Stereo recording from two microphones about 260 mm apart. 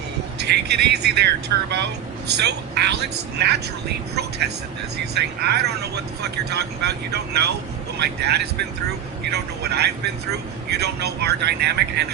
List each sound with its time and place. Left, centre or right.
0.3 s speech: right